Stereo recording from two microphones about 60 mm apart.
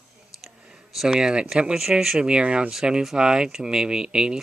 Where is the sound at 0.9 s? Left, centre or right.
Centre.